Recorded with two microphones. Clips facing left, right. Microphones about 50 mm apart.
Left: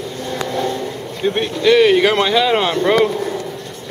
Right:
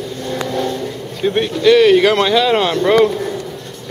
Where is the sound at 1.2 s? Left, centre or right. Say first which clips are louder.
Right 2 dB; centre.